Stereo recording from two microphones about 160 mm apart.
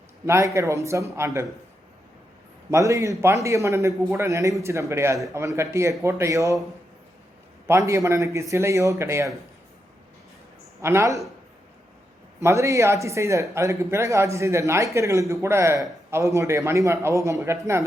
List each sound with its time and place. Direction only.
0.3 s a man's voice: 15° right (ahead or behind)
2.6 s a man's voice: 20° right (ahead or behind)
7.7 s speech: 15° right (ahead or behind)
10.8 s speech: 15° right (ahead or behind)
12.4 s speech: 20° right (ahead or behind)